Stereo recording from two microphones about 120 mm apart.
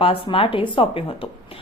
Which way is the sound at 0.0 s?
50° left (ahead or behind).